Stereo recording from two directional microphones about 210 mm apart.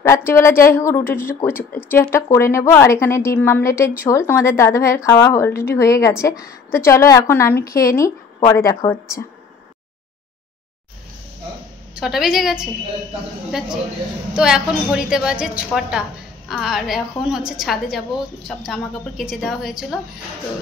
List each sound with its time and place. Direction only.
0.0 s a woman's voice: 15° left (ahead or behind)
11.9 s a woman's voice: centre (ahead or behind)